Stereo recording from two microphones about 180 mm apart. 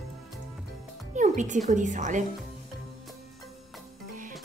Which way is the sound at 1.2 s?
45° right (ahead or behind).